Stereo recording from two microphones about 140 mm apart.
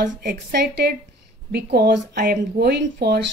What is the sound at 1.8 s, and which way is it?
Speech, 90° right.